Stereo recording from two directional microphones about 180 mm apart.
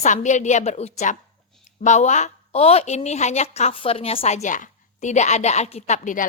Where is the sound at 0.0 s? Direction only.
40° left (ahead or behind).